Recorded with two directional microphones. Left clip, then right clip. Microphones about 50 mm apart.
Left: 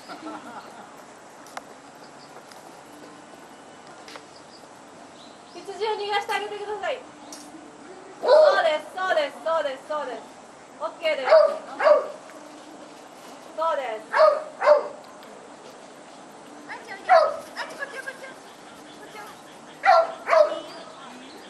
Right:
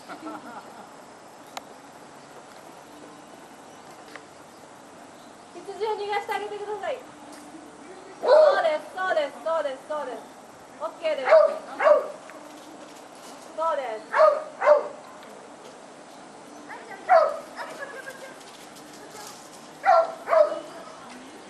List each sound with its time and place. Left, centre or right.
0.1 s a sound: centre
5.8 s a woman's voice: left
8.2 s a sound: centre
8.9 s a woman's voice: centre
13.6 s bow-wow: centre
16.6 s bow-wow: centre
19.8 s dog: centre